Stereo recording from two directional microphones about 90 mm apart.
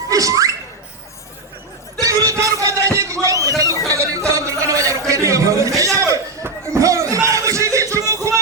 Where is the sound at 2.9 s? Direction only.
35° right (ahead or behind).